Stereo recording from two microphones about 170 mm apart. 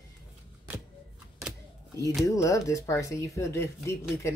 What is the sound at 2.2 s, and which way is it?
Speech, 20° left (ahead or behind).